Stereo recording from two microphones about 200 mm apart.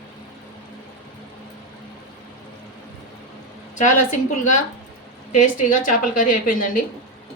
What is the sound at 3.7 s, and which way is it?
Speech, 35° left (ahead or behind).